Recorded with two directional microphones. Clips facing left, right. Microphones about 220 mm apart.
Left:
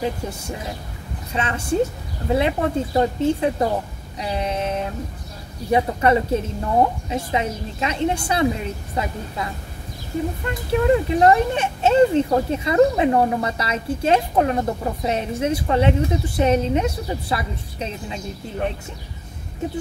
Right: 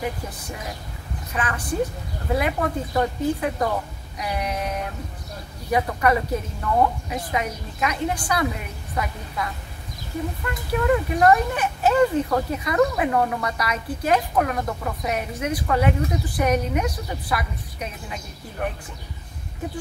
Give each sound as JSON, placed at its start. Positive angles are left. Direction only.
{"t": 0.0, "sound": "speech", "side_deg": 25}